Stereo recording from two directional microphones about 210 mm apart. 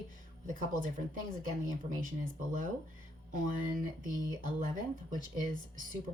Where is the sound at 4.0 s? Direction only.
40° right (ahead or behind).